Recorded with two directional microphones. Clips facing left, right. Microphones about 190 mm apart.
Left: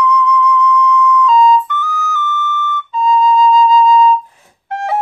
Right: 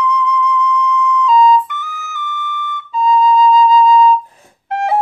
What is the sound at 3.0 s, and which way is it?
Flute, 5° right (ahead or behind).